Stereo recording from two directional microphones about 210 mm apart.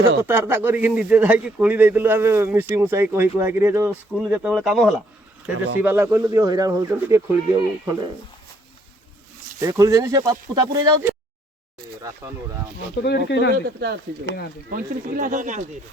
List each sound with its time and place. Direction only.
0.2 s speech: 10° right (ahead or behind)
9.6 s speech: 15° right (ahead or behind)
13.0 s speech: 55° left (ahead or behind)
13.5 s speech: 45° right (ahead or behind)